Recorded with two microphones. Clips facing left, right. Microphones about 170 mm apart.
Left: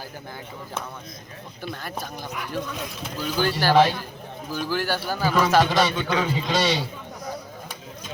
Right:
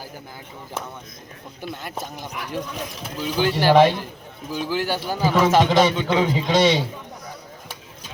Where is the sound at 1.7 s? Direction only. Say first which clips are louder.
Right 1 dB; 20° right (ahead or behind).